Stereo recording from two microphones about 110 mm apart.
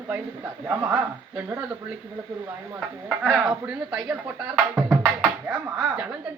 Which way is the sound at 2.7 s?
5° right (ahead or behind).